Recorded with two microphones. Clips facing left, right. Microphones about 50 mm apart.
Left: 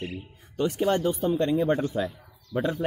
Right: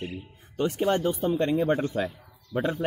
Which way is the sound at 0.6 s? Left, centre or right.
Right.